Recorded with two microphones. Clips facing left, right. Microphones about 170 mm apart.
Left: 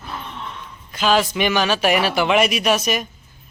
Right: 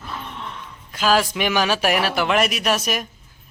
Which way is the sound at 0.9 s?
5° right (ahead or behind).